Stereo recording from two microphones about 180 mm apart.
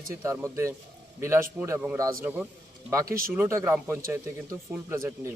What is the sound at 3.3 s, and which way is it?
Speech, 15° right (ahead or behind).